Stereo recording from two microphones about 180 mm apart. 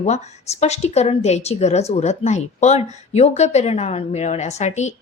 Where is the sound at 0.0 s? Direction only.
40° left (ahead or behind).